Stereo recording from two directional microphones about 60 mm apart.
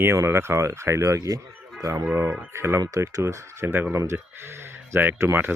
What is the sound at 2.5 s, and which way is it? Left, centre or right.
Speech, right.